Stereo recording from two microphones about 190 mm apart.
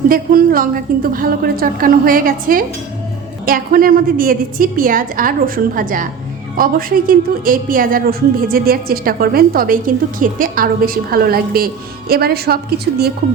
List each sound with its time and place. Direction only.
0.1 s a woman's voice: 50° right (ahead or behind)